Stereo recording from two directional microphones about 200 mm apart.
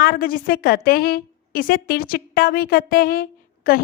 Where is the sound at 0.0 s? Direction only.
45° left (ahead or behind).